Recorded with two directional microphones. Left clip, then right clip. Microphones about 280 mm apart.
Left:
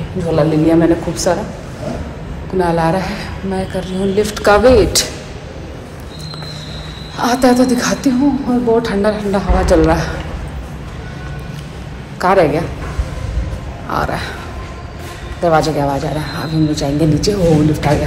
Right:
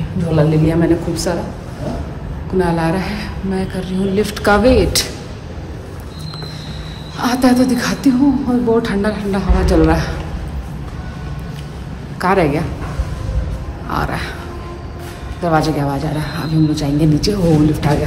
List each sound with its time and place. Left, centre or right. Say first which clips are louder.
0.3 s a woman's voice: left 3 dB; centre
2.6 s a woman's voice: left 4 dB; centre
7.2 s a woman's voice: left 2 dB; centre
12.2 s a woman's voice: left 3 dB; centre
13.8 s speech: left 2 dB; centre
15.4 s a woman's voice: left 3 dB; centre